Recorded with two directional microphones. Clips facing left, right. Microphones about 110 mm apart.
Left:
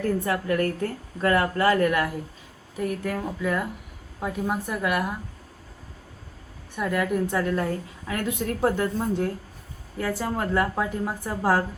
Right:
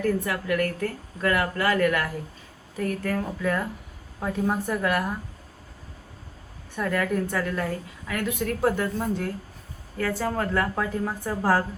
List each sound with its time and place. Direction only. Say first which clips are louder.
0.0 s a woman's voice: left 1 dB; 25° left (ahead or behind)
2.7 s speech: right 1 dB; 10° left (ahead or behind)
6.7 s a woman's voice: left 1 dB; 15° left (ahead or behind)